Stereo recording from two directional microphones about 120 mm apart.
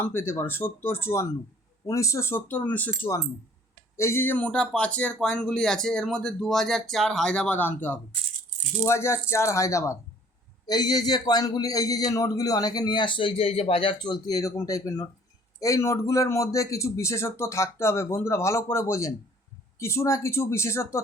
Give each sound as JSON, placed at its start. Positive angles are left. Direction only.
{"t": 0.0, "sound": "a man's voice", "side_deg": 20}